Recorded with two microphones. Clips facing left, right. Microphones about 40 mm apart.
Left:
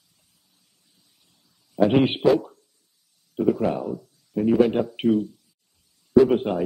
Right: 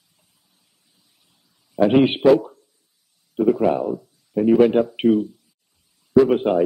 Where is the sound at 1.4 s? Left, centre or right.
Centre.